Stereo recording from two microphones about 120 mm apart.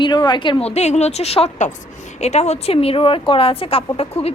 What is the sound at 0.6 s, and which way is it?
A woman's voice, 65° left (ahead or behind).